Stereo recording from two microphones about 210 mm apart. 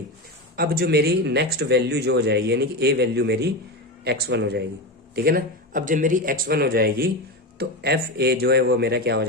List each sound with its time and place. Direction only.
0.5 s speech: 45° right (ahead or behind)